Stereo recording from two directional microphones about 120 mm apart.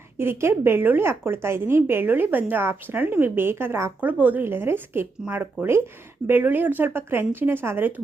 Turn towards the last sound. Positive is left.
turn(degrees=-15)  # may be behind; listen again after turning